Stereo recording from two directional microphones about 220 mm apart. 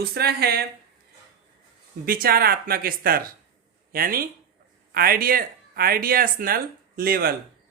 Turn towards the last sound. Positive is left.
turn(degrees=-45)  # may be behind; listen again after turning